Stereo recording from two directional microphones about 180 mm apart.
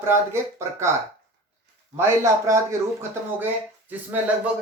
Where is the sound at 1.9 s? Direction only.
15° right (ahead or behind).